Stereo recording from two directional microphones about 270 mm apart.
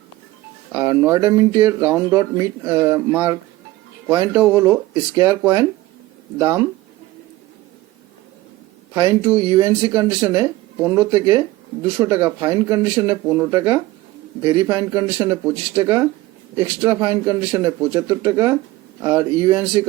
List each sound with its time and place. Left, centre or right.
0.7 s speech: centre
9.0 s speech: centre